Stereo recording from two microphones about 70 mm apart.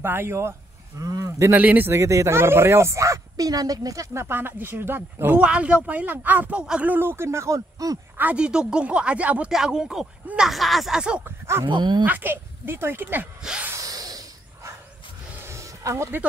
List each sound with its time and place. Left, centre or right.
0.0 s speech: right
1.5 s speech: right
1.9 s speech: right
4.1 s speech: right
5.4 s speech: centre; by 8.0 s right
8.4 s speech: centre
9.5 s speech: centre
10.5 s speech: centre
11.0 s speech: centre
11.2 s speech: right
11.6 s speech: right
12.0 s speech: right
13.7 s snort: right
15.4 s a sound: right